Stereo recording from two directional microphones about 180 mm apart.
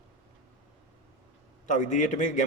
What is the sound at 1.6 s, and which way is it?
Speech, 45° left (ahead or behind).